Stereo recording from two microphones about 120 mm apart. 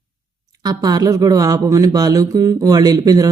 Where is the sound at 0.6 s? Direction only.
35° right (ahead or behind).